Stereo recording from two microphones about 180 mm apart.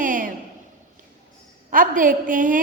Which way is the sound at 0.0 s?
50° right (ahead or behind).